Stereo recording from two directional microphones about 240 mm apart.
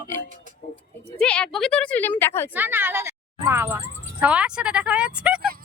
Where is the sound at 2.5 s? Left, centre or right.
Centre.